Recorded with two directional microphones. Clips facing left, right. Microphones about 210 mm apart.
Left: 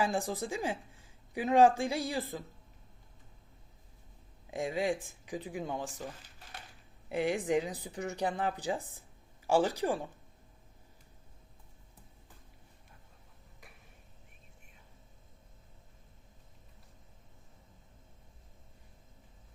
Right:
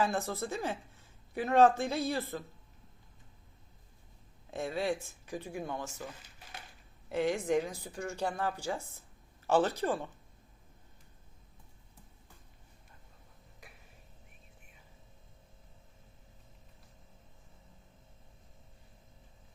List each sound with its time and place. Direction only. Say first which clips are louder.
0.0 s a woman's voice: even; 15° left (ahead or behind)
4.5 s a woman's voice: left 1 dB; 15° left (ahead or behind)
7.1 s a woman's voice: even; 15° left (ahead or behind)